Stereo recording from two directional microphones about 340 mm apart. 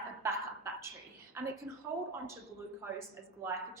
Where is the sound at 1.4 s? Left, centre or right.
Centre.